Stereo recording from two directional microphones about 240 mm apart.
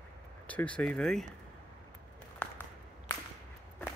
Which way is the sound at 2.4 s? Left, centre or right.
Centre.